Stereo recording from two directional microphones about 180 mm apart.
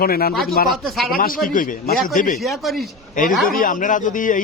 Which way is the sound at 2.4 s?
Centre (ahead or behind).